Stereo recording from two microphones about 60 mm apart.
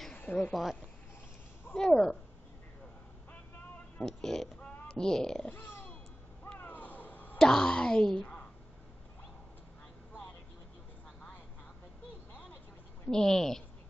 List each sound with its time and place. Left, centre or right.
0.1 s a sound: left
0.4 s speech: centre
1.8 s a woman's voice: centre
4.0 s speech: centre
5.5 s burping: left
6.6 s a sound: left
7.3 s speech: centre
13.1 s a woman's voice: centre